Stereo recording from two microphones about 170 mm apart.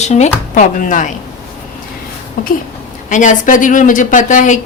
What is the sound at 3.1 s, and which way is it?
Speech, 45° left (ahead or behind).